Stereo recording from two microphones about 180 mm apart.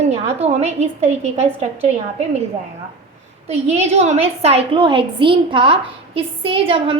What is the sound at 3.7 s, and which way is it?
A woman's voice, 40° right (ahead or behind).